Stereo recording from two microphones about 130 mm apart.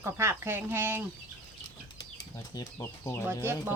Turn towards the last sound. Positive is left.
turn(degrees=-20)  # may be behind; listen again after turning